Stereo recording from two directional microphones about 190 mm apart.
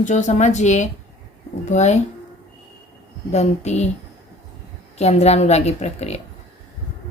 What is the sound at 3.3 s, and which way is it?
Speech, 35° left (ahead or behind).